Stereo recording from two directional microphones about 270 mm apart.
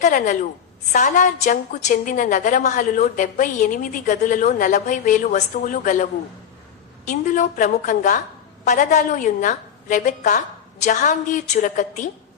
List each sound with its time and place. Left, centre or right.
0.0 s a woman's voice: left
7.1 s a woman's voice: left